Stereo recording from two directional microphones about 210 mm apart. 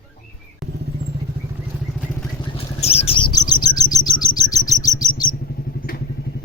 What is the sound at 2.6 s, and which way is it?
Chirp, 30° left (ahead or behind).